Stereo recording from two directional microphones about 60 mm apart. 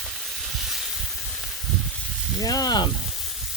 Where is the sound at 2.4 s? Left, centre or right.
Left.